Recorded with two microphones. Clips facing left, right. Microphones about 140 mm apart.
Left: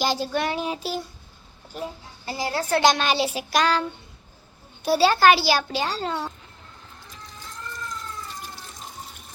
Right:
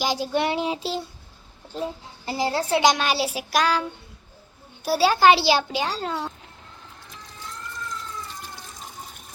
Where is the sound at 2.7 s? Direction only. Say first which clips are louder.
Left 1 dB; 15° right (ahead or behind).